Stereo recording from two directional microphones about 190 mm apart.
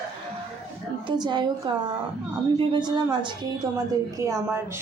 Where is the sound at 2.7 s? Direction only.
25° right (ahead or behind).